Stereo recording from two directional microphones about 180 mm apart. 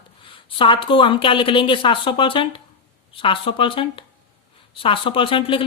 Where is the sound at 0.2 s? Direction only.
30° left (ahead or behind).